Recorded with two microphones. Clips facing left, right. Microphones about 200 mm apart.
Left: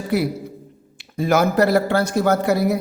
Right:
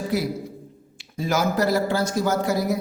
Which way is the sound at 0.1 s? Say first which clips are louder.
Left 6 dB; 60° left (ahead or behind).